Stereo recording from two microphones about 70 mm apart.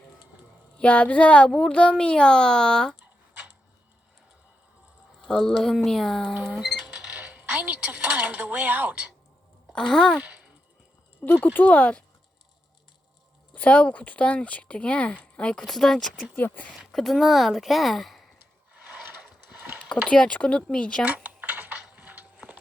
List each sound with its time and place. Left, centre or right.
0.8 s speech: centre
3.0 s a sound: centre
5.2 s speech: centre
7.1 s speech: right
9.7 s speech: centre
10.2 s a sound: centre
11.4 s speech: left
13.5 s speech: left; by 16.2 s centre
16.3 s speech: left
16.7 s speech: centre
18.7 s a sound: centre
19.9 s speech: centre
21.2 s typing: centre
21.9 s music: right